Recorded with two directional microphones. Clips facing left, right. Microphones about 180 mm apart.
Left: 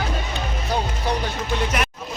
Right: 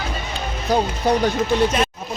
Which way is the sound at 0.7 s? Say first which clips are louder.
Right 6 dB; 45° right (ahead or behind).